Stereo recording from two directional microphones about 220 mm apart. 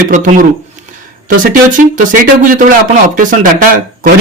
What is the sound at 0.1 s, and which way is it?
Speech, 35° right (ahead or behind).